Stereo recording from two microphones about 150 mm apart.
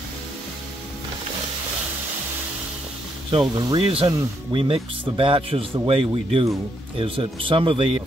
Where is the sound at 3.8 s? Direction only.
40° right (ahead or behind).